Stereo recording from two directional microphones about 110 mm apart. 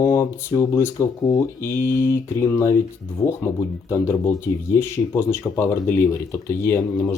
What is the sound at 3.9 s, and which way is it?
Speech, 30° left (ahead or behind).